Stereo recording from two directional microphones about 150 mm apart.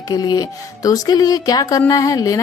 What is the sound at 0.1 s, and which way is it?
A woman's voice, 25° left (ahead or behind).